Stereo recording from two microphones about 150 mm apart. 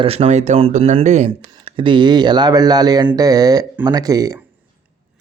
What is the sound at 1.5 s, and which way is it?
Speech, 35° right (ahead or behind).